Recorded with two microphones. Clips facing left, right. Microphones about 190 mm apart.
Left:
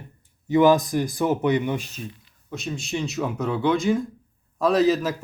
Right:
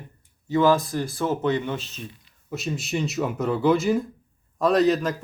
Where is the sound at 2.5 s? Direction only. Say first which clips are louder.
Right 1 dB; 5° right (ahead or behind).